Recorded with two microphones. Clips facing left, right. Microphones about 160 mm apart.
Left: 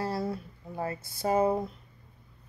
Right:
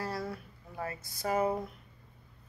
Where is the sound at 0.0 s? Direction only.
25° left (ahead or behind).